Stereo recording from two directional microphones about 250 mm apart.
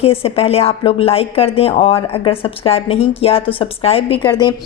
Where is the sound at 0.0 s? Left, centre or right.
Left.